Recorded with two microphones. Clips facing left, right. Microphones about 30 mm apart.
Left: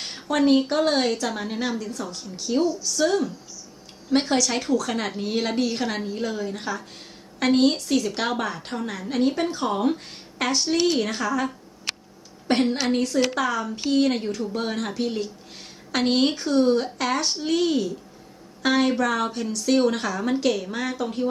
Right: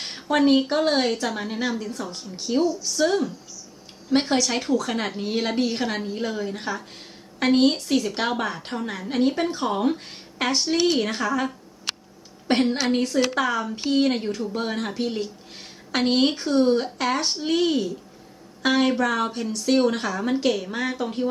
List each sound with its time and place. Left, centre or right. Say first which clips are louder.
0.0 s a sound: right 2 dB; centre
0.3 s speech: even; centre
2.1 s a woman's voice: even; right